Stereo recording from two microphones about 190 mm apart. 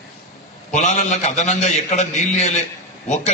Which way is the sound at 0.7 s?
40° left (ahead or behind).